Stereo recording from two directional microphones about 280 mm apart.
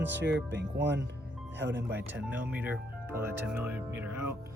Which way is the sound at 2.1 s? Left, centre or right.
Centre.